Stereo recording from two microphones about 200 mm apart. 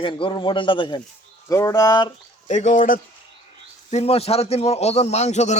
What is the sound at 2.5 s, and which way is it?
A man's voice, 40° left (ahead or behind).